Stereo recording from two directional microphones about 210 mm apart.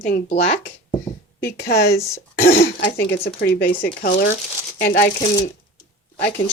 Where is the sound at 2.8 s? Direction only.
50° left (ahead or behind).